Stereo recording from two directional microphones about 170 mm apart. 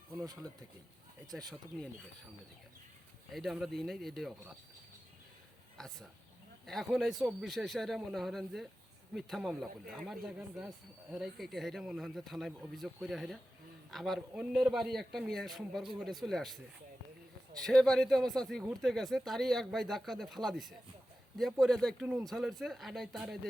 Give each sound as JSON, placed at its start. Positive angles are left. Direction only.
{"t": 3.3, "sound": "speech", "side_deg": 0}
{"t": 5.7, "sound": "speech", "side_deg": 0}
{"t": 17.7, "sound": "speech", "side_deg": 0}